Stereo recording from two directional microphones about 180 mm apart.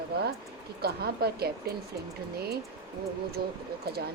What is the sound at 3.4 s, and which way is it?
Speech, 60° right (ahead or behind).